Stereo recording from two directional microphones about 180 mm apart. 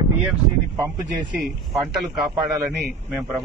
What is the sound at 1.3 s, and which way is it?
Speech, centre (ahead or behind).